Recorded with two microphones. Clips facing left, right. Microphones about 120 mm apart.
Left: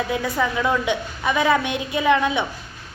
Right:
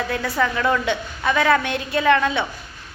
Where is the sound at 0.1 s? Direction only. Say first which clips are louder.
Even; 15° left (ahead or behind).